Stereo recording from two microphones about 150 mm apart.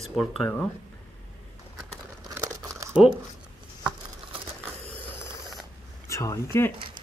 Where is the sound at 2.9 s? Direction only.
5° right (ahead or behind).